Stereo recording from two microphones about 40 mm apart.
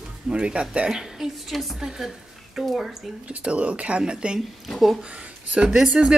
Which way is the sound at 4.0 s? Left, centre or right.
Right.